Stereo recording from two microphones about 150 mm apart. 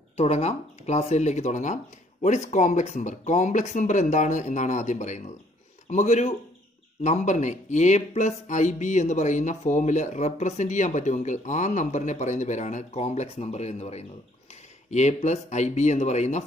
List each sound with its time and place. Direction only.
0.2 s speech: 45° left (ahead or behind)